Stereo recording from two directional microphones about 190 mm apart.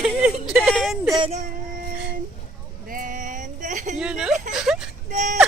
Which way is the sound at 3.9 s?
5° right (ahead or behind).